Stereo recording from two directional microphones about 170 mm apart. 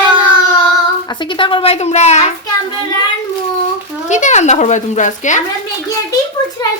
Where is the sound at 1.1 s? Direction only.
30° left (ahead or behind).